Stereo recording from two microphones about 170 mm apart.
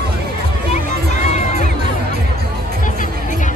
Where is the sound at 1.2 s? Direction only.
45° left (ahead or behind).